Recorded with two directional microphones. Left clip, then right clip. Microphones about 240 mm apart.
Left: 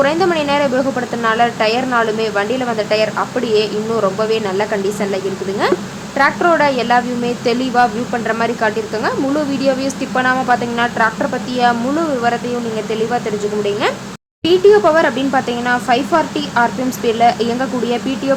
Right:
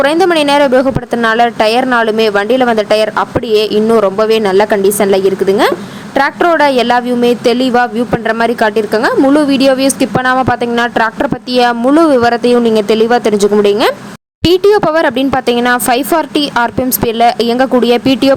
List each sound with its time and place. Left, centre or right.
0.0 s a woman's voice: right